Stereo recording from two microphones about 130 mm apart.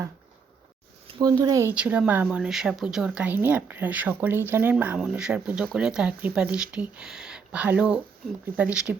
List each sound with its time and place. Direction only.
1.2 s speech: 30° right (ahead or behind)
1.7 s speech: 10° right (ahead or behind)